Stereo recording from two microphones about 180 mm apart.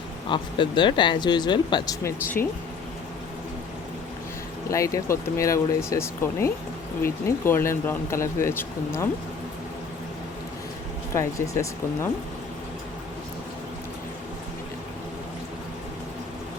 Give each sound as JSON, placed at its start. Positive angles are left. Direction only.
{"t": 0.3, "sound": "speech", "side_deg": 25}
{"t": 4.7, "sound": "speech", "side_deg": 15}
{"t": 11.1, "sound": "speech", "side_deg": 15}